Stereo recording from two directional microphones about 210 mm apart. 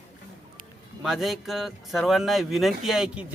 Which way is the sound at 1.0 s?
Centre (ahead or behind).